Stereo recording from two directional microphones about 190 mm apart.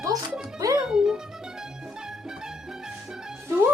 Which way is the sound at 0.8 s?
5° right (ahead or behind).